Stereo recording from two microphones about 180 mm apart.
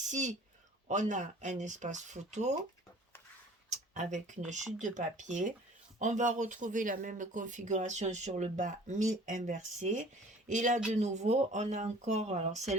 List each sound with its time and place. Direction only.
0.0 s speech: 40° right (ahead or behind)
3.9 s speech: 40° right (ahead or behind)